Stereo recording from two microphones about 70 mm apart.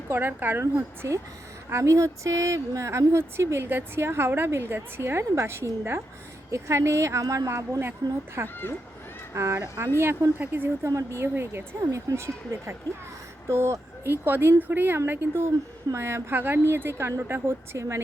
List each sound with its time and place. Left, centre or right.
0.1 s speech: right
1.0 s a woman's voice: right
8.0 s speech: right
8.4 s a woman's voice: right
9.3 s a woman's voice: right
10.3 s speech: right
10.8 s a woman's voice: right
11.8 s a woman's voice: right